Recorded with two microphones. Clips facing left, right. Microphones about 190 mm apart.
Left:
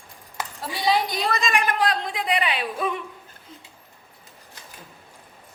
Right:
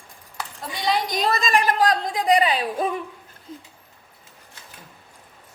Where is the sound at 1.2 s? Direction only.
40° right (ahead or behind).